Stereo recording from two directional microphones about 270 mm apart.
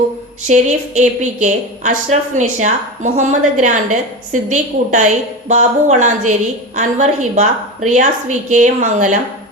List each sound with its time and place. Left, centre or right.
0.4 s a woman's voice: right